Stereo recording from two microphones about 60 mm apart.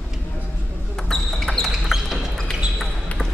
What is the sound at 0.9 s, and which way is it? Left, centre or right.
Basketball bounce, centre.